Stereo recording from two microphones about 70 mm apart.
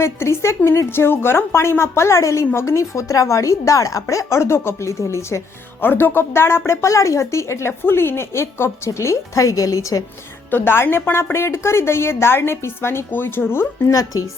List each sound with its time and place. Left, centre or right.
0.0 s a woman's voice: left
5.8 s a woman's voice: left
6.7 s a woman's voice: left
10.5 s a woman's voice: left
13.9 s a woman's voice: left